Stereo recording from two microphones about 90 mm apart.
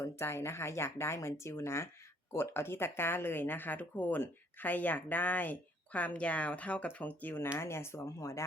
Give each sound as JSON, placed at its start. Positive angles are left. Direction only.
{"t": 0.0, "sound": "speech", "side_deg": 30}